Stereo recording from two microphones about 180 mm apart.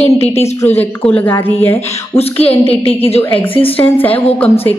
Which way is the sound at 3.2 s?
10° left (ahead or behind).